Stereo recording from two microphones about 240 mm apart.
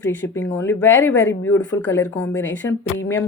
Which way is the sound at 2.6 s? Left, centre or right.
Centre.